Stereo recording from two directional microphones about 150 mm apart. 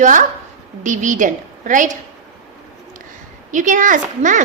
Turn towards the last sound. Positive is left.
turn(degrees=-55)  # may be behind; listen again after turning